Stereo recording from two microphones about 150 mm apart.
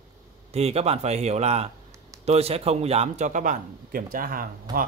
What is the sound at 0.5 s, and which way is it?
Speech, 45° right (ahead or behind).